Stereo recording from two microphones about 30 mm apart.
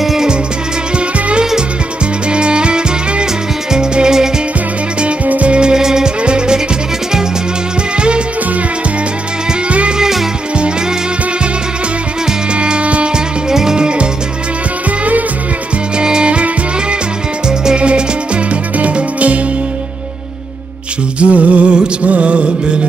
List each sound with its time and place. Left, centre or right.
2.3 s music: right
5.2 s music: right
5.5 s music: right
9.7 s music: right
12.5 s music: right
13.1 s music: centre
16.0 s music: right
17.7 s music: right
21.2 s a sound: right
22.0 s music: right